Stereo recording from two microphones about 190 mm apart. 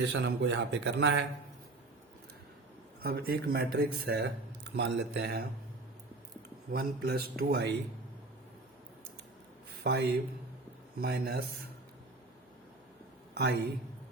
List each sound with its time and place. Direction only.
0.0 s a man's voice: 70° right (ahead or behind)
3.0 s speech: 55° right (ahead or behind)
6.7 s speech: 55° right (ahead or behind)
9.8 s speech: 60° right (ahead or behind)
13.3 s speech: 60° right (ahead or behind)